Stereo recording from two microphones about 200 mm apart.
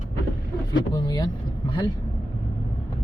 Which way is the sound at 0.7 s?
20° left (ahead or behind).